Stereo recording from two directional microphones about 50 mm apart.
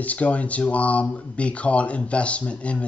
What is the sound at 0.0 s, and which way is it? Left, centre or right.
Speech, left.